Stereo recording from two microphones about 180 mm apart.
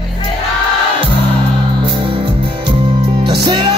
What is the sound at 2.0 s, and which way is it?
Music, 30° right (ahead or behind).